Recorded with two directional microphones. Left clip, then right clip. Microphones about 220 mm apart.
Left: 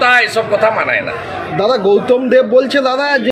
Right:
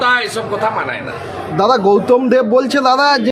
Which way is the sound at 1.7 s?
55° right (ahead or behind).